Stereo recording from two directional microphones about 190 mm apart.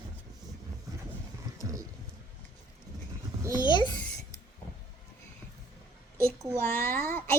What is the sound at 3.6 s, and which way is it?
Babbling, 25° left (ahead or behind).